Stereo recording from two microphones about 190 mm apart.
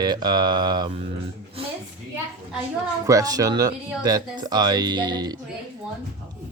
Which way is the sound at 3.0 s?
20° right (ahead or behind).